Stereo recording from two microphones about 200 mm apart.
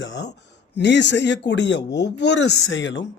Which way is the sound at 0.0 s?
60° left (ahead or behind).